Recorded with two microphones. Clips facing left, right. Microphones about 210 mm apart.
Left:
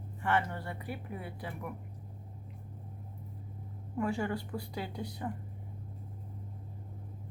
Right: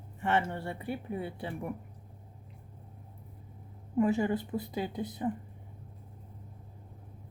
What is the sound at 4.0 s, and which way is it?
Speech, 20° right (ahead or behind).